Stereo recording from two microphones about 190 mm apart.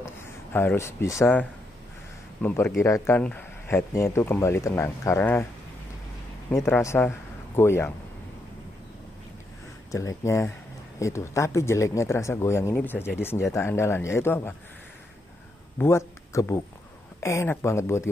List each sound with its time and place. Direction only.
0.0 s speech: 10° left (ahead or behind)
6.5 s speech: 15° left (ahead or behind)
9.8 s speech: 15° left (ahead or behind)
15.8 s speech: 15° left (ahead or behind)